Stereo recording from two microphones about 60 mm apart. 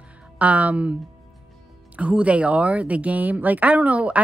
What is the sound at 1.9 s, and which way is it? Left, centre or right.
Speech, right.